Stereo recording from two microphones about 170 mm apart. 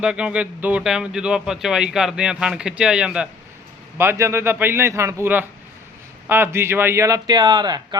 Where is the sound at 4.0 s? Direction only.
15° right (ahead or behind).